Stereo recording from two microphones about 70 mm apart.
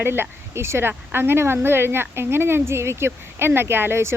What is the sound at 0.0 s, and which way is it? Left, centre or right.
Speech, right.